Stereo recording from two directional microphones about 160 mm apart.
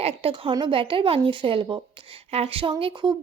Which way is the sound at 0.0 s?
35° right (ahead or behind).